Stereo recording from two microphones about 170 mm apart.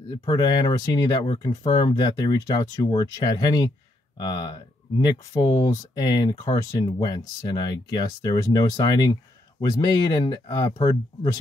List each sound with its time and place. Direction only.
0.2 s speech: 25° left (ahead or behind)